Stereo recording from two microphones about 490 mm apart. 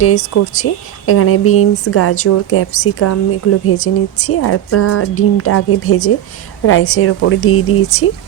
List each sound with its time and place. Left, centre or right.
0.0 s speech: left